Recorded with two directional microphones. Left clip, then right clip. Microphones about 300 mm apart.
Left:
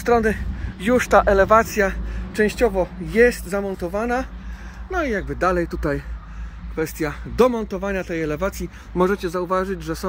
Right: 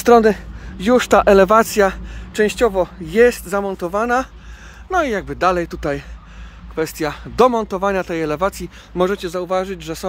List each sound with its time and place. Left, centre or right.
0.0 s speech: right